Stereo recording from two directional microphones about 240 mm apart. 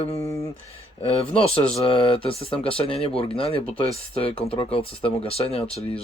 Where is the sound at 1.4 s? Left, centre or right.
Left.